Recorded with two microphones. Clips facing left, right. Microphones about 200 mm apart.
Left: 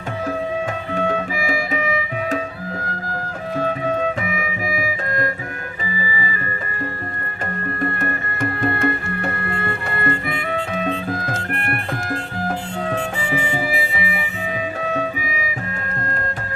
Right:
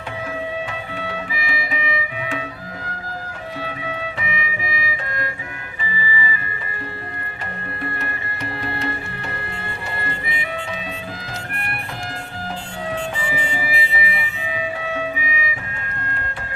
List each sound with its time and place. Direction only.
0.7 s music: 45° left (ahead or behind)
3.6 s music: 45° left (ahead or behind)
7.8 s music: 50° left (ahead or behind)